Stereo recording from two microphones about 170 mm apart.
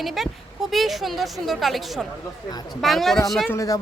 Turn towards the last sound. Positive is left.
turn(degrees=20)  # may be behind; listen again after turning